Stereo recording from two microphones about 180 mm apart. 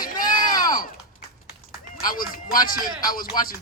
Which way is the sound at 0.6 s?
50° left (ahead or behind).